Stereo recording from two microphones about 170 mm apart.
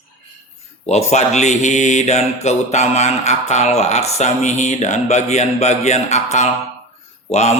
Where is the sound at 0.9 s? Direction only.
40° left (ahead or behind).